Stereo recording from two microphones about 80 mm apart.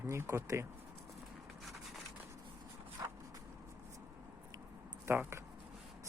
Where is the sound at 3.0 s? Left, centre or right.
Right.